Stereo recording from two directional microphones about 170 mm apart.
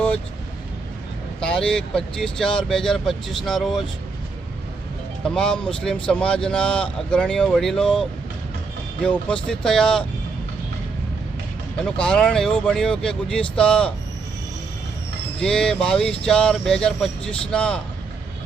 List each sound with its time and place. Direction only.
1.4 s speech: 5° left (ahead or behind)
5.2 s speech: 5° left (ahead or behind)
11.9 s speech: 5° left (ahead or behind)
15.4 s speech: 5° left (ahead or behind)